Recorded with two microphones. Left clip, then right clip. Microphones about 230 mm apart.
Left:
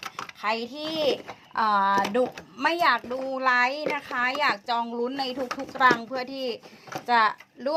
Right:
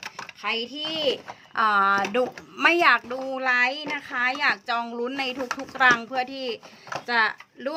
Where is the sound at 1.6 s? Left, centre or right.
Centre.